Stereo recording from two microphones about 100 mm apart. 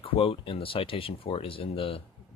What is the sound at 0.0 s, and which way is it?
Speech, 65° left (ahead or behind).